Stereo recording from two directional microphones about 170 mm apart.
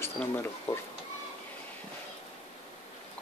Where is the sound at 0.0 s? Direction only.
15° left (ahead or behind).